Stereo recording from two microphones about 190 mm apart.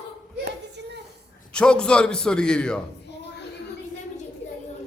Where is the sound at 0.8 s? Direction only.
65° right (ahead or behind).